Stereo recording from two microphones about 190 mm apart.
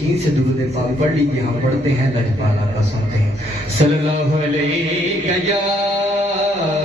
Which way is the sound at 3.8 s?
30° right (ahead or behind).